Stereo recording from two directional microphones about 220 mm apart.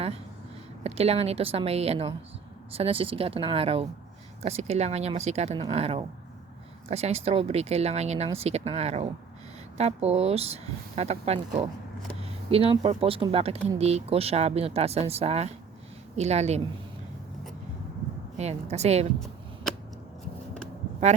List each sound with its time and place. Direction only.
0.9 s speech: 30° right (ahead or behind)
18.3 s speech: 30° right (ahead or behind)